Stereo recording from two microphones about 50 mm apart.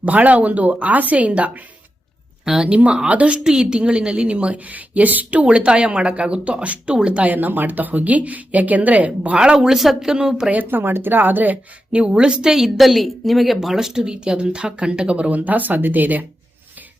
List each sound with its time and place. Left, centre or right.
0.0 s a woman's voice: right
2.4 s a woman's voice: centre
7.3 s a woman's voice: right
9.4 s speech: centre
10.5 s a woman's voice: right
11.9 s speech: right